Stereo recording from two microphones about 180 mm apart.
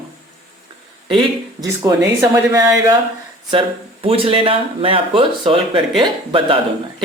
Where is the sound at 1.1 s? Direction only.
25° right (ahead or behind).